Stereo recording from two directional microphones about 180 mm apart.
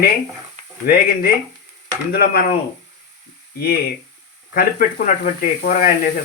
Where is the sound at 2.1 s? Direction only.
60° left (ahead or behind).